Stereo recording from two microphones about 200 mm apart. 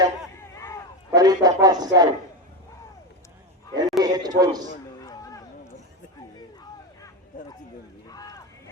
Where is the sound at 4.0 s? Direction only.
20° right (ahead or behind).